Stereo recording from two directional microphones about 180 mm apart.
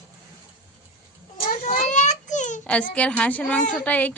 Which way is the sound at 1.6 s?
45° left (ahead or behind).